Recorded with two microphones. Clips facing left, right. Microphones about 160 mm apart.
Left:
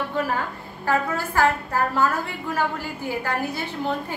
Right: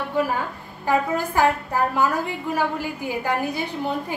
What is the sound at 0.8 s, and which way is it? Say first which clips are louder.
A woman's voice: right 2 dB; 15° right (ahead or behind).